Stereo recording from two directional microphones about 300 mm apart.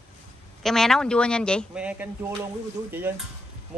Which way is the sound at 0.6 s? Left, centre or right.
Centre.